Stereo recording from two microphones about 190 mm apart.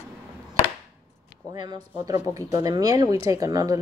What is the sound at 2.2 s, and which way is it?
Speech, 20° right (ahead or behind).